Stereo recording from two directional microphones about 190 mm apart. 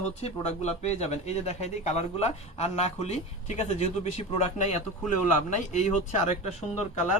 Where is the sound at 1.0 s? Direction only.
35° left (ahead or behind).